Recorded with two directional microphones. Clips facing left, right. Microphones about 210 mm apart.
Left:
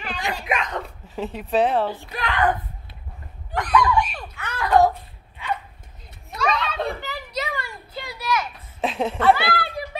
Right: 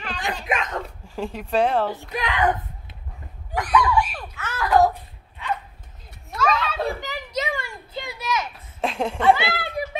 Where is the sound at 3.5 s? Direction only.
10° right (ahead or behind).